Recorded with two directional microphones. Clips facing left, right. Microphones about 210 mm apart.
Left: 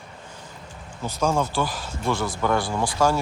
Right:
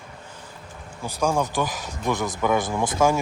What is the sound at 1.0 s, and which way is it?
Speech, 15° right (ahead or behind).